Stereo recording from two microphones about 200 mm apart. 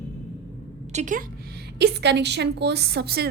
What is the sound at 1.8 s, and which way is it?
A woman's voice, 55° right (ahead or behind).